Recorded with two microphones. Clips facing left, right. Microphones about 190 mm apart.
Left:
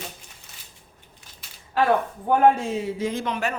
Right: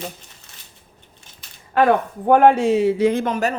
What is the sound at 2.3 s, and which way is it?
Speech, 75° right (ahead or behind).